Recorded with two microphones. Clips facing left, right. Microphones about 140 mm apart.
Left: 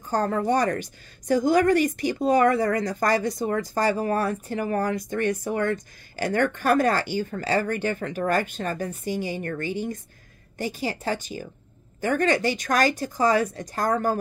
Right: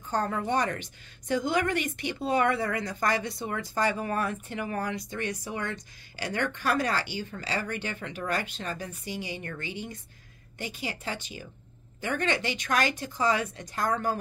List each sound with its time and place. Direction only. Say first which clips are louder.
0.1 s a woman's voice: left 5 dB; 40° left (ahead or behind)